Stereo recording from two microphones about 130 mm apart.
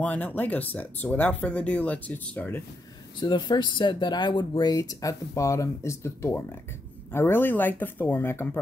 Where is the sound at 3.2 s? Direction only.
35° left (ahead or behind).